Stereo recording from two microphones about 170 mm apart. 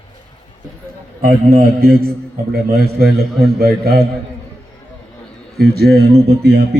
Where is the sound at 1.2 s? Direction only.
65° right (ahead or behind).